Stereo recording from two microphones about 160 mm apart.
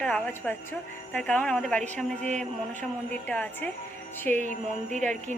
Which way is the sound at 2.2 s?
50° right (ahead or behind).